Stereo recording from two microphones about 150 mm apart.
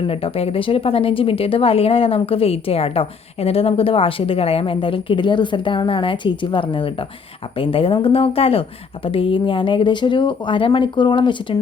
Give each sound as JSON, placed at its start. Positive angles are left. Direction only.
{"t": 0.1, "sound": "speech", "side_deg": 40}